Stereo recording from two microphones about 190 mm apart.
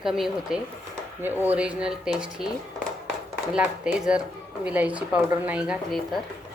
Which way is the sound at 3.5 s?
5° right (ahead or behind).